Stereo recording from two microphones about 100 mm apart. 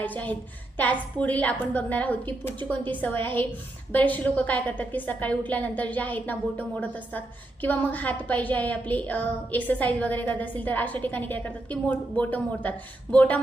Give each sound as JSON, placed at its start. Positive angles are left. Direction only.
{"t": 0.0, "sound": "a woman's voice", "side_deg": 15}